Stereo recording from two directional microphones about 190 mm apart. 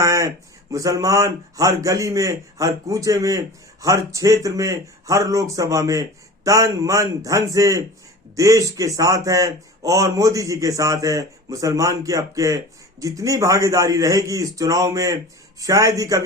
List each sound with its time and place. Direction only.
0.0 s speech: 15° right (ahead or behind)